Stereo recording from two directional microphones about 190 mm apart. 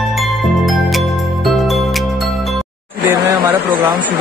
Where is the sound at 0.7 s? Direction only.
Centre (ahead or behind).